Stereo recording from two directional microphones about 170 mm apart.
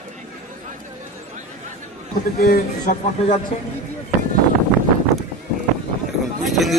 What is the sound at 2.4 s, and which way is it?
Speech, 60° left (ahead or behind).